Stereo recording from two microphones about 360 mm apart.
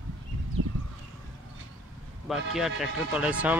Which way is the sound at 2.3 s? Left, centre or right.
Centre.